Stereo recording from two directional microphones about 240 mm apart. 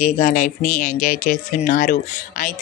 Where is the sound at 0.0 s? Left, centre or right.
Left.